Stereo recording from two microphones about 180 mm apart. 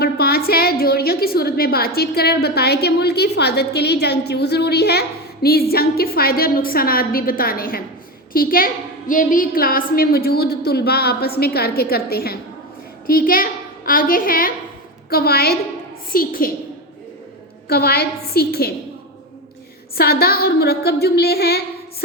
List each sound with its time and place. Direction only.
0.0 s a woman's voice: 60° left (ahead or behind)
17.7 s a woman's voice: 60° left (ahead or behind)
20.0 s a woman's voice: 60° left (ahead or behind)